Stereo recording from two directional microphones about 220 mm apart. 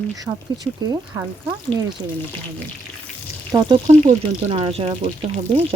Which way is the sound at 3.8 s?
30° right (ahead or behind).